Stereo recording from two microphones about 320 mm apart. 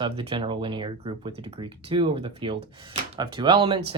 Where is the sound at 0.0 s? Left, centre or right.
Centre.